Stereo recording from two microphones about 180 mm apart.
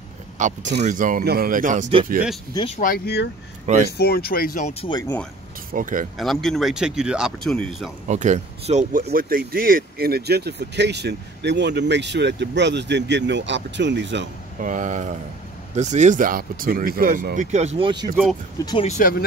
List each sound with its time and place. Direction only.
0.4 s speech: 45° right (ahead or behind)
2.5 s speech: 30° left (ahead or behind)
2.8 s speech: 55° left (ahead or behind)
3.6 s speech: 40° right (ahead or behind)
4.0 s speech: 60° left (ahead or behind)
4.8 s speech: 35° left (ahead or behind)
5.7 s speech: 50° right (ahead or behind)
6.1 s speech: centre (ahead or behind)
8.1 s speech: 40° right (ahead or behind)
9.0 s speech: 55° right (ahead or behind); by 14.2 s 80° right
14.6 s speech: 45° right (ahead or behind); by 18.1 s 25° right (ahead or behind)
18.9 s speech: 50° left (ahead or behind)